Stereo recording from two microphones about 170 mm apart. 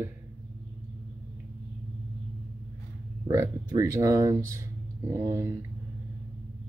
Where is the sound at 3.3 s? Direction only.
20° right (ahead or behind).